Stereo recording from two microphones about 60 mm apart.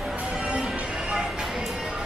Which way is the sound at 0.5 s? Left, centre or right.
Centre.